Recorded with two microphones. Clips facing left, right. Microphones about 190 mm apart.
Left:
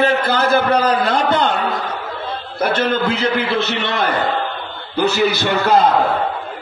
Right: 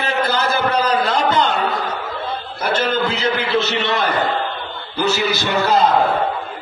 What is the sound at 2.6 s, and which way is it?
Speech, 55° left (ahead or behind).